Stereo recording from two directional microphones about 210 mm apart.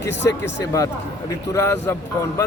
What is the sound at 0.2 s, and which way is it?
Speech, 15° left (ahead or behind).